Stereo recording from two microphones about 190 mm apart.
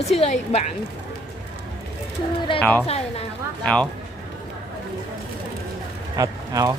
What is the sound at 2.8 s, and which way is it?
Speech, 35° left (ahead or behind).